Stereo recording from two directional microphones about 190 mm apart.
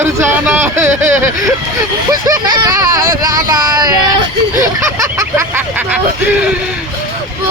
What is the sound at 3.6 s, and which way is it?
Female singing, 20° right (ahead or behind).